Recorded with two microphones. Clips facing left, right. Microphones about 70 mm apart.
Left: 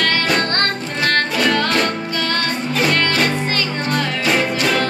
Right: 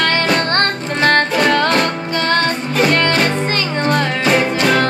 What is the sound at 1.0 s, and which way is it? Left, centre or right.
Music, right.